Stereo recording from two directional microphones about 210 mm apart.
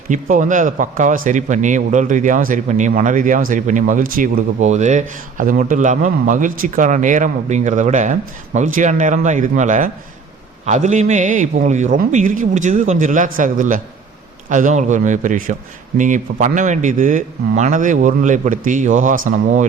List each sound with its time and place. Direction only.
0.1 s speech: 35° right (ahead or behind)